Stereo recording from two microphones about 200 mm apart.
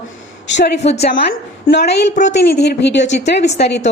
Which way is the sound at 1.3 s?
55° left (ahead or behind).